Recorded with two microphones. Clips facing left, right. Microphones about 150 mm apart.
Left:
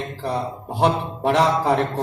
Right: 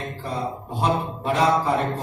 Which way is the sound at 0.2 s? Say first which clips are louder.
Left 4 dB; 80° left.